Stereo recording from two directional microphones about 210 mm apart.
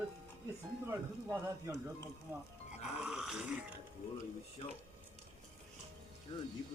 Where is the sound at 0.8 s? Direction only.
10° right (ahead or behind).